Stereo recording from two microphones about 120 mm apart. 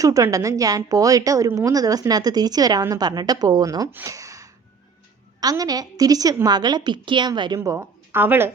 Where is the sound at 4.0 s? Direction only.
25° right (ahead or behind).